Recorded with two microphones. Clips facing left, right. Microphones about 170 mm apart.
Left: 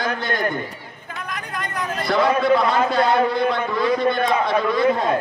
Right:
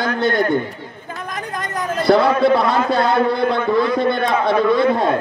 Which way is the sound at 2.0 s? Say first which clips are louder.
Right 5 dB; 30° right (ahead or behind).